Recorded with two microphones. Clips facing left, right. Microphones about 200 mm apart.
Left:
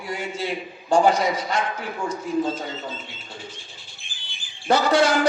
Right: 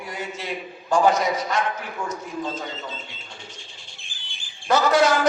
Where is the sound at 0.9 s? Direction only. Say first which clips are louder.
Left 1 dB; 30° left (ahead or behind).